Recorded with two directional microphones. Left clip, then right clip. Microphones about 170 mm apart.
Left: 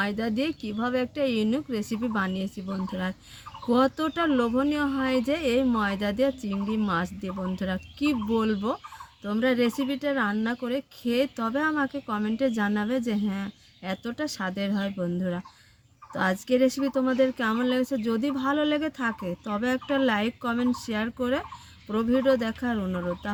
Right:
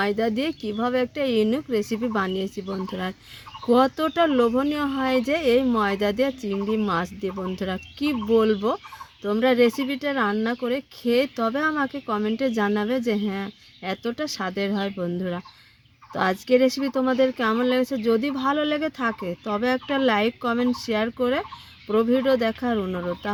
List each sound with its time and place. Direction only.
0.0 s speech: 55° right (ahead or behind)